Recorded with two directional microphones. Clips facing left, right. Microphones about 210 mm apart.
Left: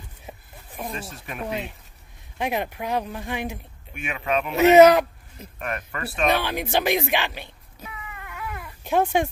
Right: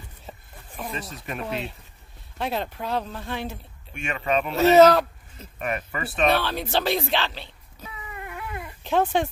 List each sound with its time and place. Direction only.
0.3 s a sound: 10° left (ahead or behind)
1.1 s speech: centre (ahead or behind)
2.3 s speech: 15° left (ahead or behind)
4.5 s speech: 15° left (ahead or behind)
5.6 s speech: 5° right (ahead or behind)
6.2 s speech: 15° left (ahead or behind)
7.8 s cat: 30° right (ahead or behind)
8.8 s speech: 10° left (ahead or behind)